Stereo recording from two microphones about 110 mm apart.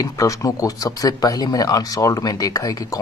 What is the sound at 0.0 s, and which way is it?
Speech, 30° left (ahead or behind).